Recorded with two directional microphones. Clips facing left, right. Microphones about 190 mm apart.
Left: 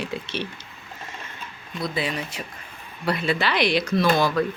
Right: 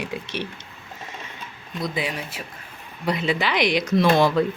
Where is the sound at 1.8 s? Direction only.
15° right (ahead or behind).